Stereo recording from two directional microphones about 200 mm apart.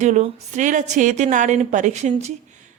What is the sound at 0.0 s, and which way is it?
A woman's voice, 35° right (ahead or behind).